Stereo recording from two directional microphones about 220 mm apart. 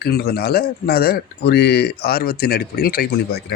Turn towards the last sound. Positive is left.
turn(degrees=45)  # may be behind; listen again after turning